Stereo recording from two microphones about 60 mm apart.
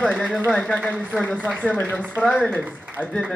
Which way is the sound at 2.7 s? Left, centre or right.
Right.